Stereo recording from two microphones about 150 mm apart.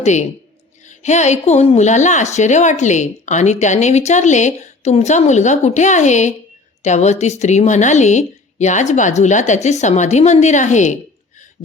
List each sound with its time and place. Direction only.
0.0 s a woman's voice: 50° left (ahead or behind)